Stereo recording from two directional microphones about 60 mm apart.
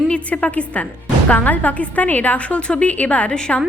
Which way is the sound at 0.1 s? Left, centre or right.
Left.